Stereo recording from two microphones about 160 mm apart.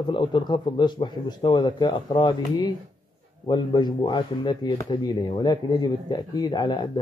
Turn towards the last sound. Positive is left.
turn(degrees=25)  # may be behind; listen again after turning